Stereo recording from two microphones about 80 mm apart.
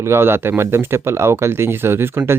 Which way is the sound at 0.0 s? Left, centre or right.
Right.